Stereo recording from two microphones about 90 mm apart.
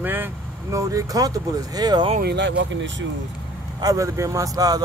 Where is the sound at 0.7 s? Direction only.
40° right (ahead or behind).